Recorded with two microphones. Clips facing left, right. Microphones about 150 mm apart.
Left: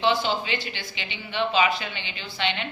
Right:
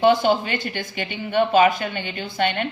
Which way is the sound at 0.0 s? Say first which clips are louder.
Right 7 dB; 50° right (ahead or behind).